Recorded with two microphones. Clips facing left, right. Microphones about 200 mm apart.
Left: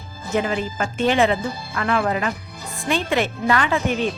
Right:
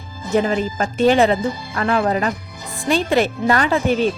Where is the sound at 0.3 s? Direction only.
35° right (ahead or behind).